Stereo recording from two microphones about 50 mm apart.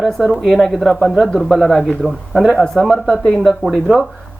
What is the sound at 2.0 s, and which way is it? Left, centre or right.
Speech, right.